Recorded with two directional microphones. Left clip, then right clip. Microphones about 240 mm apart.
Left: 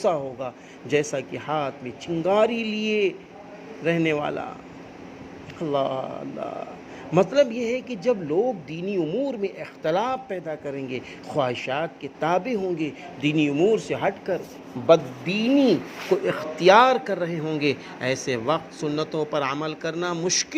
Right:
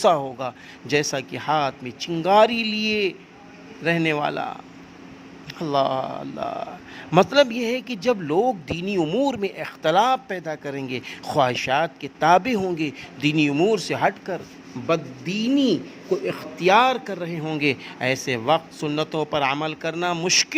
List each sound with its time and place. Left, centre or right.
0.0 s speech: right
5.5 s speech: right
16.2 s a man's voice: centre
17.4 s speech: right